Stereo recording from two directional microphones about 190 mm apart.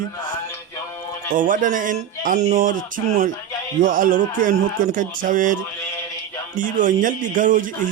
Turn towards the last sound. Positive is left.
turn(degrees=-45)  # may be behind; listen again after turning